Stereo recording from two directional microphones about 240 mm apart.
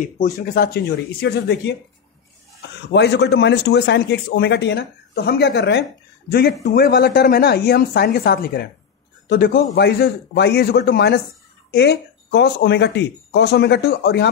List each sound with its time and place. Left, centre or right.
0.0 s a man's voice: left
2.9 s a man's voice: left